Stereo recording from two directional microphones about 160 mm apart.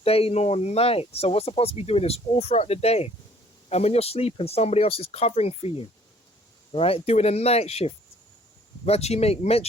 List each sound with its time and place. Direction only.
0.0 s speech: 35° left (ahead or behind)